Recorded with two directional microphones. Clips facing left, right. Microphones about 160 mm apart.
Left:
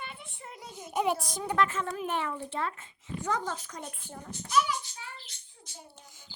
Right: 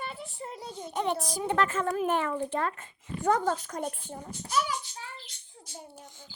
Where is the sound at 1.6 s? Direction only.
45° right (ahead or behind).